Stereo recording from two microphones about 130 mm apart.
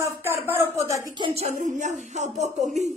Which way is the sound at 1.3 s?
65° right (ahead or behind).